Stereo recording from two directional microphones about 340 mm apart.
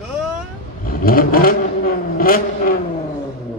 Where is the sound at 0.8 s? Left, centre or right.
Left.